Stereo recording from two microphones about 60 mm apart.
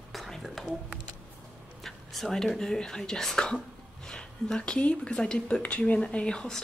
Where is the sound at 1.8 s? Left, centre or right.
Centre.